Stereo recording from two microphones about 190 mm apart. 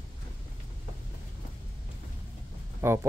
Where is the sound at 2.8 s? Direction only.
10° right (ahead or behind).